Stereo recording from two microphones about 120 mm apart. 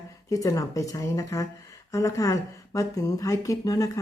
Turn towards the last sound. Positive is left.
turn(degrees=30)  # may be behind; listen again after turning